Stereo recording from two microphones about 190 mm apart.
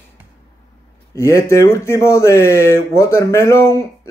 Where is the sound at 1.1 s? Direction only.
15° left (ahead or behind).